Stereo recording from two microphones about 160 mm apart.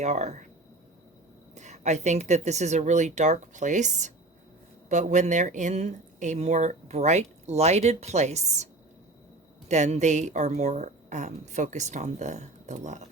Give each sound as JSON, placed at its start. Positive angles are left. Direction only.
{"t": 0.0, "sound": "speech", "side_deg": -45}
{"t": 1.5, "sound": "speech", "side_deg": -45}